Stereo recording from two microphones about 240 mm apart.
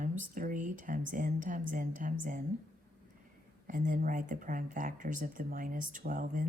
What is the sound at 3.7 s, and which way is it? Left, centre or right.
Speech, right.